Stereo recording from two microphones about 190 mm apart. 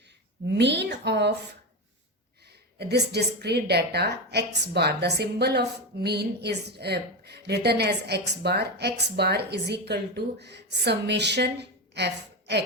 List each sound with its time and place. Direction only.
0.4 s a woman's voice: 65° right (ahead or behind)
2.7 s a woman's voice: 60° right (ahead or behind)